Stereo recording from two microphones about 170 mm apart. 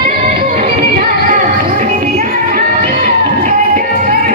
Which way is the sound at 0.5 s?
50° right (ahead or behind).